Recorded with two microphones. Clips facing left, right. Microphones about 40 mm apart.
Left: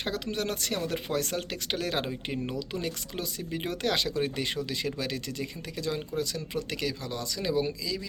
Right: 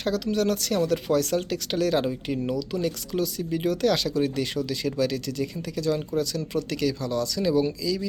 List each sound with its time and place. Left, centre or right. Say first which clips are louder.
0.0 s speech: right 7 dB; left